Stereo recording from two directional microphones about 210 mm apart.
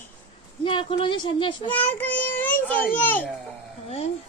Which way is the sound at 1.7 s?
10° left (ahead or behind).